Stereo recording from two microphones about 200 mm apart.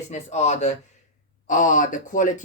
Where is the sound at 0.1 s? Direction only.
35° left (ahead or behind).